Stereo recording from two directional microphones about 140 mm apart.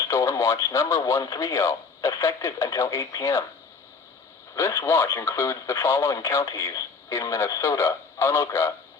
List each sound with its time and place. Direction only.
0.0 s speech: 25° left (ahead or behind)
4.5 s speech: 20° left (ahead or behind)